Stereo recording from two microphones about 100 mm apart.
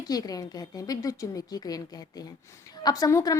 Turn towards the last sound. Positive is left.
turn(degrees=35)  # may be behind; listen again after turning